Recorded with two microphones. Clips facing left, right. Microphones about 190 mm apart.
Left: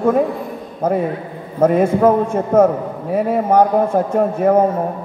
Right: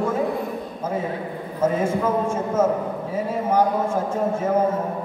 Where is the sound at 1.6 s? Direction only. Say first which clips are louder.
Left 8 dB; 65° left (ahead or behind).